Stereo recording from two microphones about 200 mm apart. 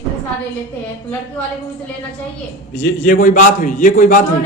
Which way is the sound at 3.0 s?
40° left (ahead or behind).